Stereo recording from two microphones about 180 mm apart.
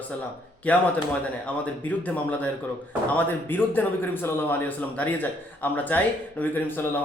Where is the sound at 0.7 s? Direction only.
10° left (ahead or behind).